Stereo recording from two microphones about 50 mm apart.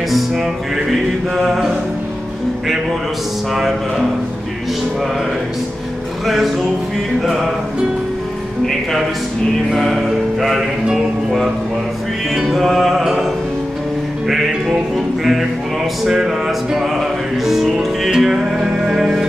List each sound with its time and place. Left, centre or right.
0.1 s music: centre
6.2 s music: centre
9.8 s music: centre
12.4 s music: centre
14.2 s music: centre